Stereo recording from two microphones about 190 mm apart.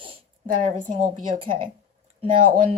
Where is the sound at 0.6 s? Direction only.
40° right (ahead or behind).